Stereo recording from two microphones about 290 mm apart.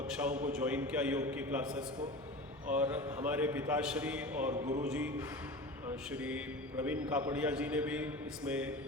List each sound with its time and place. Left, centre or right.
0.6 s a man's voice: centre
4.5 s music: right
4.9 s a man's voice: centre